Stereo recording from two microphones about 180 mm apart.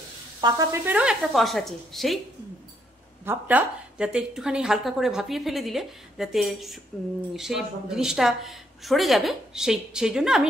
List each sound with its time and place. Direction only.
0.4 s sizzle: 25° right (ahead or behind)
0.8 s a woman's voice: 5° right (ahead or behind)
3.3 s a woman's voice: 10° right (ahead or behind)